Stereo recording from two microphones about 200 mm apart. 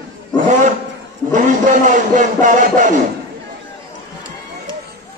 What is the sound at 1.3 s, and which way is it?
Speech, 40° right (ahead or behind).